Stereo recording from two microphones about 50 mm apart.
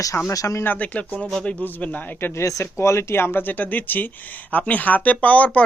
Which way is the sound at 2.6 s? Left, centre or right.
Left.